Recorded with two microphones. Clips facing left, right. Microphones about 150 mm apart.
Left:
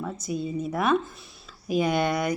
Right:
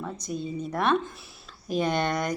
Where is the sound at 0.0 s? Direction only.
5° left (ahead or behind).